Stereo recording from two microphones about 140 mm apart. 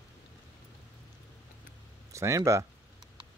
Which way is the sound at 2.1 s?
20° right (ahead or behind).